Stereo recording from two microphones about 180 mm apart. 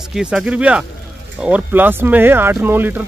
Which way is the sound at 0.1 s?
5° right (ahead or behind).